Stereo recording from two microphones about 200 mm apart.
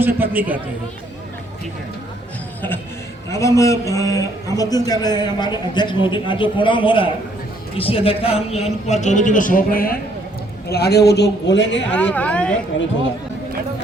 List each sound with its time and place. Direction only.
0.2 s a man's voice: 10° right (ahead or behind)
2.6 s a man's voice: 10° left (ahead or behind); by 11.9 s 60° left (ahead or behind)
11.9 s speech: 5° left (ahead or behind)